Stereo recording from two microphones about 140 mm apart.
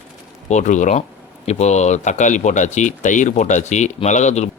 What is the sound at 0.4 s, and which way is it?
Speech, 60° left (ahead or behind).